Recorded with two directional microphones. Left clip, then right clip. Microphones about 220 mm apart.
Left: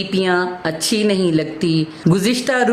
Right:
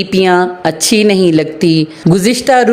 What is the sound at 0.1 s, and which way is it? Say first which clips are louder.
A woman's voice: right 8 dB; 30° right (ahead or behind).